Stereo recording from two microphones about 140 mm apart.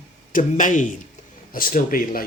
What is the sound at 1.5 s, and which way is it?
Speech, 85° left.